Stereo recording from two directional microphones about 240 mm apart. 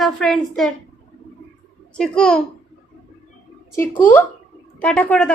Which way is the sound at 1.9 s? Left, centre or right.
Centre.